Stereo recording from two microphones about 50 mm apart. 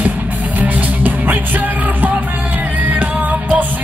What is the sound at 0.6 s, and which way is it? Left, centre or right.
Music, right.